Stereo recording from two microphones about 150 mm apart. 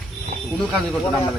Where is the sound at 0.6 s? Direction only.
Centre (ahead or behind).